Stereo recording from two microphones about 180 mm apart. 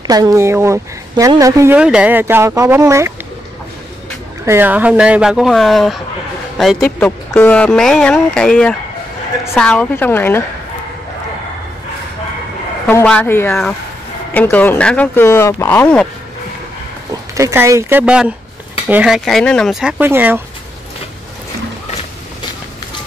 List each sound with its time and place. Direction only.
0.0 s speech: 20° right (ahead or behind)
4.5 s speech: 10° right (ahead or behind)
7.0 s speech: 10° left (ahead or behind)
12.8 s speech: 10° left (ahead or behind)
17.1 s speech: 15° right (ahead or behind)